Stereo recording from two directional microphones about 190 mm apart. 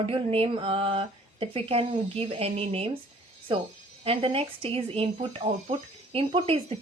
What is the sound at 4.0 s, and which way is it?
A woman's voice, 30° right (ahead or behind).